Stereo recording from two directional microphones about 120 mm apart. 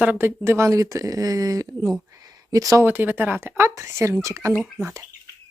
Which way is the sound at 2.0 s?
30° right (ahead or behind).